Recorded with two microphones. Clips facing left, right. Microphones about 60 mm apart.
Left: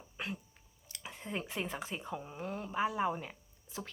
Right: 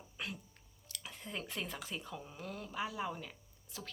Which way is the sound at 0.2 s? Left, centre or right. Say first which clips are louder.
Left 3 dB; left.